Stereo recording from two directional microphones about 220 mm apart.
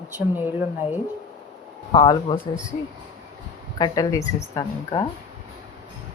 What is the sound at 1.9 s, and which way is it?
Speech, 20° left (ahead or behind).